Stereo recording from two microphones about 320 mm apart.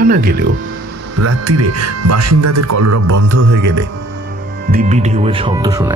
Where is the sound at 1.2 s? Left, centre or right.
Right.